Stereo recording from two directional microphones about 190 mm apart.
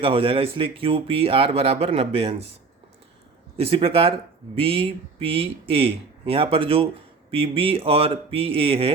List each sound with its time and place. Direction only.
0.0 s speech: 30° right (ahead or behind)
3.6 s speech: 30° right (ahead or behind)